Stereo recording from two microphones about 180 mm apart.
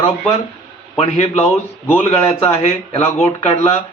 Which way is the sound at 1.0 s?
35° left (ahead or behind).